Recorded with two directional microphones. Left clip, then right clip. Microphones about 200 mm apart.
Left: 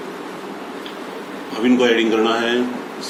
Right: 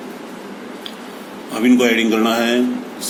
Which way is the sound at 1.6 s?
55° right (ahead or behind).